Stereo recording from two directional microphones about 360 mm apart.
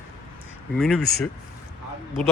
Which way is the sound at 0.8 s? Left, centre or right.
Centre.